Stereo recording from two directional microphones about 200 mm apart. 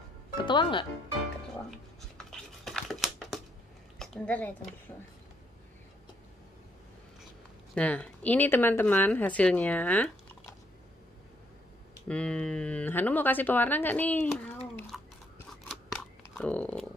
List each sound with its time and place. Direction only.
0.4 s speech: 25° left (ahead or behind)
2.6 s a sound: centre (ahead or behind)
4.0 s a woman's voice: 5° left (ahead or behind)
7.7 s speech: 5° left (ahead or behind)
12.1 s speech: 5° left (ahead or behind)
14.9 s toothbrush: centre (ahead or behind)
16.2 s a sound: 5° left (ahead or behind)